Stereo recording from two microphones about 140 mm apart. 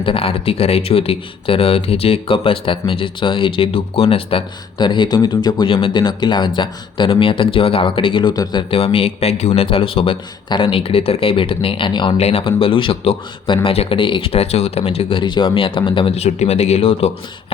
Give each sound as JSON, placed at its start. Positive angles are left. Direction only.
{"t": 0.0, "sound": "speech", "side_deg": 45}
{"t": 8.7, "sound": "speech", "side_deg": 40}
{"t": 12.1, "sound": "speech", "side_deg": 45}
{"t": 15.2, "sound": "speech", "side_deg": 35}